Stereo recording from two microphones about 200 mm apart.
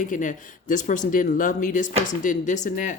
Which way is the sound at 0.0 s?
40° left (ahead or behind).